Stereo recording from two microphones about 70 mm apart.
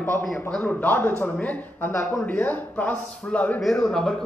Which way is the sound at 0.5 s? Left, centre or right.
Left.